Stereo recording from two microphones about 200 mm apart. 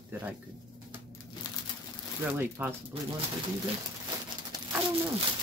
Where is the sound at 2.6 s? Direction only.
10° right (ahead or behind).